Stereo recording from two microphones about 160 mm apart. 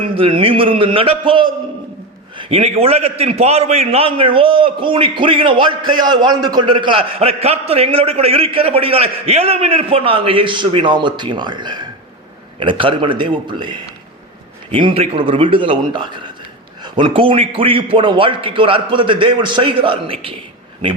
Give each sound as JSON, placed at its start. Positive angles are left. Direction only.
{"t": 0.0, "sound": "a man's voice", "side_deg": -35}